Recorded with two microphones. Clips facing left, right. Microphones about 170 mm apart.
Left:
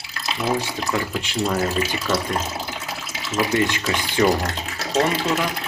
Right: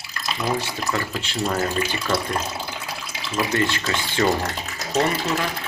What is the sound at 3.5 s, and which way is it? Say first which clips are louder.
Speech: left 1 dB; 15° left (ahead or behind).